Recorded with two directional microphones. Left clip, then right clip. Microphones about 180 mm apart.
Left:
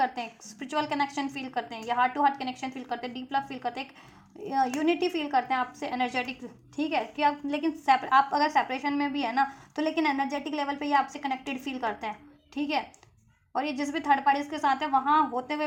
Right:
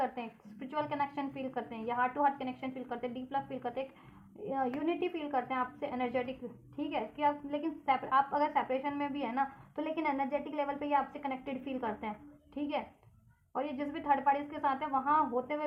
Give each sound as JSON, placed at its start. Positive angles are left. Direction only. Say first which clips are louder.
{"t": 0.0, "sound": "a woman's voice", "louder": "left 7 dB", "side_deg": 35}